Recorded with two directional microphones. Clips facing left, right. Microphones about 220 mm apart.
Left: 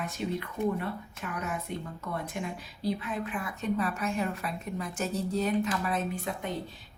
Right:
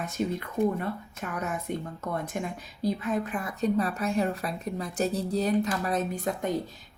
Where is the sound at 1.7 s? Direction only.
50° right (ahead or behind).